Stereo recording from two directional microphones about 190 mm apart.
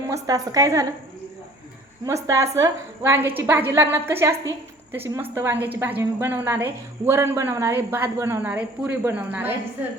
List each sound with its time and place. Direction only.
0.1 s speech: 20° right (ahead or behind)
2.0 s speech: 15° right (ahead or behind)